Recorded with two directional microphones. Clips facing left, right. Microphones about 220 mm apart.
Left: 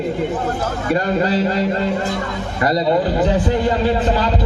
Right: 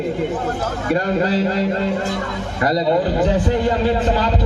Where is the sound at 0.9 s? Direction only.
50° right (ahead or behind).